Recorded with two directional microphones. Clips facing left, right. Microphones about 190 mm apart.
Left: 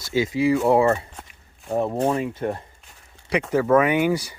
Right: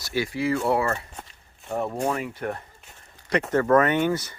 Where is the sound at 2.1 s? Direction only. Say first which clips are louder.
Left 5 dB; 25° left (ahead or behind).